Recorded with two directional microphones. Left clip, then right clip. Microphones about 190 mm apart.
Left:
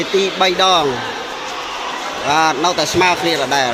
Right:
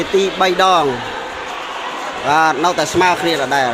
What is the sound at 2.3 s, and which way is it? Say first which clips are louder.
Speech: right 1 dB; 20° right (ahead or behind).